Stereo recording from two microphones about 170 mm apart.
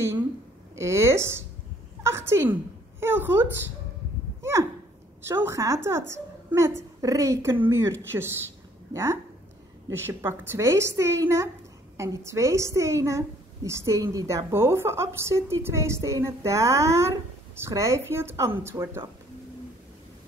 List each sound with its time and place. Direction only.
0.7 s a woman's voice: 15° right (ahead or behind)
4.4 s a sound: 15° right (ahead or behind)
5.3 s a woman's voice: 15° right (ahead or behind)